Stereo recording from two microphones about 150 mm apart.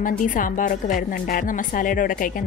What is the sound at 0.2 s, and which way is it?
A woman's voice, 60° left (ahead or behind).